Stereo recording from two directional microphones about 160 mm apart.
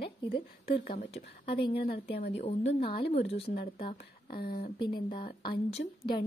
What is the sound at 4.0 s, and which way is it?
Speech, 70° left (ahead or behind).